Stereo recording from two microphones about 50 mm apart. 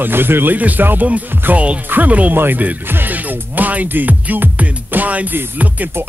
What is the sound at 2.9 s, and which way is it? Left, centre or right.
Speech, right.